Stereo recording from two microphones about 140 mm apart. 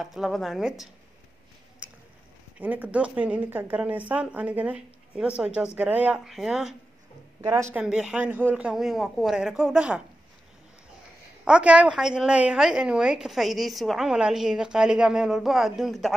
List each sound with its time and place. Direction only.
0.0 s a woman's voice: 5° right (ahead or behind)
1.8 s a sound: 10° right (ahead or behind)
2.6 s speech: 10° right (ahead or behind)
7.4 s speech: 20° right (ahead or behind)
7.7 s a woman's voice: 5° right (ahead or behind)
11.4 s a woman's voice: 10° right (ahead or behind)